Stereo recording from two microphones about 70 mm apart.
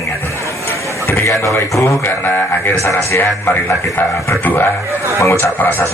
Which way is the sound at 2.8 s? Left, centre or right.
Left.